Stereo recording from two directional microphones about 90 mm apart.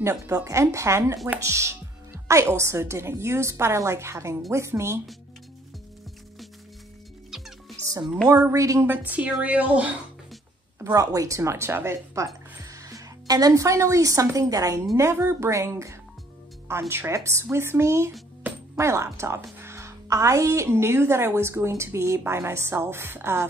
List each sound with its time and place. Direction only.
0.0 s a woman's voice: 40° right (ahead or behind)
7.2 s music: 5° right (ahead or behind)
8.3 s a woman's voice: 40° right (ahead or behind)
8.8 s a woman's voice: 20° right (ahead or behind)
10.8 s a woman's voice: 45° right (ahead or behind)
15.0 s a woman's voice: 30° right (ahead or behind)